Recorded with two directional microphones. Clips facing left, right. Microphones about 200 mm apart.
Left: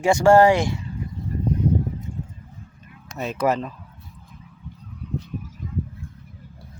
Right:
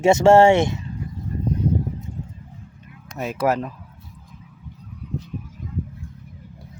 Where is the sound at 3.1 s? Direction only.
10° right (ahead or behind).